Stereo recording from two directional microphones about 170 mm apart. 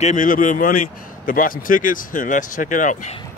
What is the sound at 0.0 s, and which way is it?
Speech, 45° left (ahead or behind).